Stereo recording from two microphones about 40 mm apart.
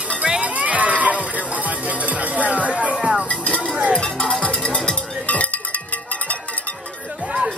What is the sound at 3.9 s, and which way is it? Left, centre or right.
Music, left.